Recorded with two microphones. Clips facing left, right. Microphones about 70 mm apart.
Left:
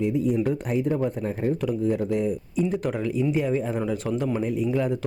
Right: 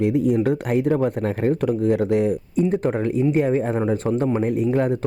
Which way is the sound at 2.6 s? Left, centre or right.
Right.